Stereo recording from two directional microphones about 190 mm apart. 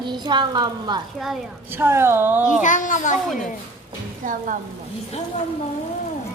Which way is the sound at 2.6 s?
40° left (ahead or behind).